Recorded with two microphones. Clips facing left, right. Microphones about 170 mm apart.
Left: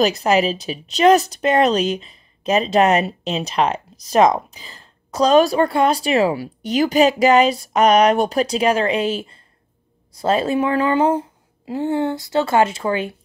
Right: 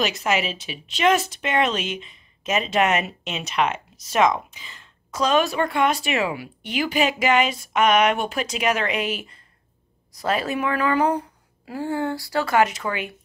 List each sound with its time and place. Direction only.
0.0 s a woman's voice: 35° left (ahead or behind)